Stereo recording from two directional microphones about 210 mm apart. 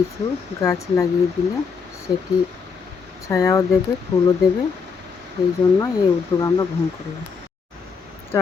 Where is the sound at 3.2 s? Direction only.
15° left (ahead or behind).